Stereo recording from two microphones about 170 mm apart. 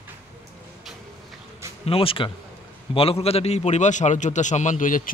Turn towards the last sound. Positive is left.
turn(degrees=50)  # may be behind; listen again after turning